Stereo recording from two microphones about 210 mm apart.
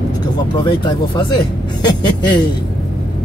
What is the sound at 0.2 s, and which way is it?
Speech, 20° left (ahead or behind).